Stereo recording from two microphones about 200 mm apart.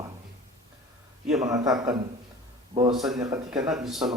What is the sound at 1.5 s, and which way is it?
Speech, 20° right (ahead or behind).